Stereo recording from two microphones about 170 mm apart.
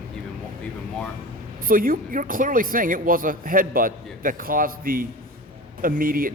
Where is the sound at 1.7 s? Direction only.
55° right (ahead or behind).